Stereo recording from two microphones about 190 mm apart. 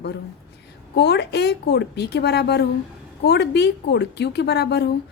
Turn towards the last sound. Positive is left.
turn(degrees=60)  # may be behind; listen again after turning